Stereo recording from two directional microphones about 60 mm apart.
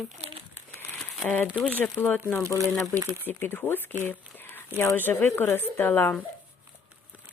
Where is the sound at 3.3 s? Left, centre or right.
Left.